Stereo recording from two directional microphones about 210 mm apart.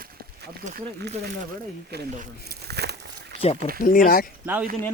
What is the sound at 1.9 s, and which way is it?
Speech, 50° right (ahead or behind).